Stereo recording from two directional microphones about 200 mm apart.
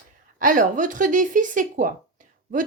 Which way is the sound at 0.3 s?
45° right (ahead or behind).